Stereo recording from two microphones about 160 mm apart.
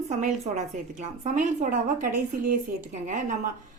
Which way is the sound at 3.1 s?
50° right (ahead or behind).